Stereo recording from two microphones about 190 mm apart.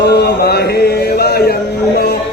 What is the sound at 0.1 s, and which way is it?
Music, 60° left (ahead or behind).